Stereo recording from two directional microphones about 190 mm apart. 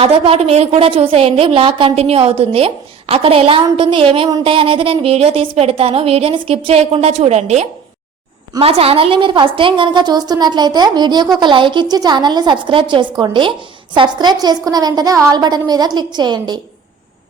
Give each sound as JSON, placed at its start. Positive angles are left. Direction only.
{"t": 0.0, "sound": "a woman's voice", "side_deg": -30}